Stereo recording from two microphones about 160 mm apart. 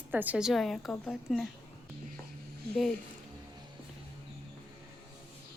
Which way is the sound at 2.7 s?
5° left (ahead or behind).